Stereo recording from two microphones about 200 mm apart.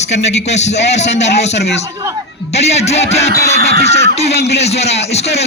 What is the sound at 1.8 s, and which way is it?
Speech, 15° right (ahead or behind).